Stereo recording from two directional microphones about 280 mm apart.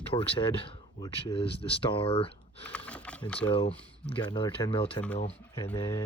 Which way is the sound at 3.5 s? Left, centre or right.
Left.